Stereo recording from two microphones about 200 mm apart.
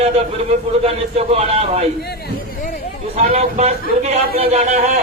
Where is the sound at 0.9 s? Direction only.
30° right (ahead or behind).